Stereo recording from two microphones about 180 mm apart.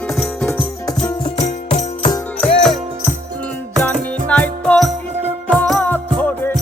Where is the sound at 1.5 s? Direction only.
40° left (ahead or behind).